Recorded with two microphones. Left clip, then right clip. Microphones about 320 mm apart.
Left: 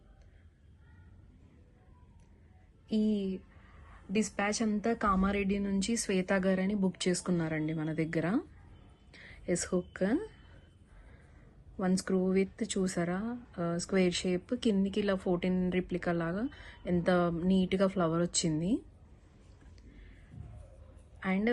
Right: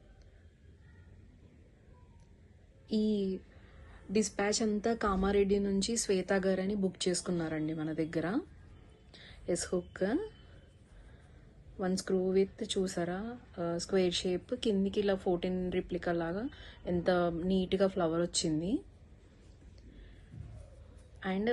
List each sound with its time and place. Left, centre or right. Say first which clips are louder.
2.9 s speech: even; centre
11.8 s a woman's voice: left 1 dB; centre